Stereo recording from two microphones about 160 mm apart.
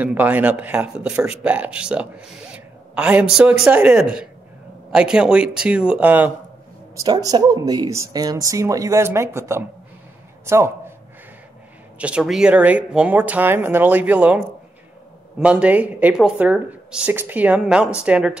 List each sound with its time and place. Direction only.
0.0 s speech: 10° right (ahead or behind)
7.0 s a man's voice: 25° right (ahead or behind)
12.0 s speech: 5° right (ahead or behind)